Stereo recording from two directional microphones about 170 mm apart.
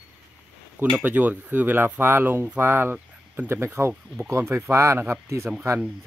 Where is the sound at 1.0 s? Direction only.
10° right (ahead or behind).